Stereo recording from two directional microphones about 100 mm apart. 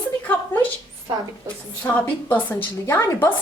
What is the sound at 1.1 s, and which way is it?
Speech, 45° right (ahead or behind).